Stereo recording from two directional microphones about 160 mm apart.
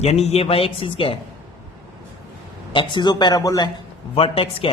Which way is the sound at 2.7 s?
30° left (ahead or behind).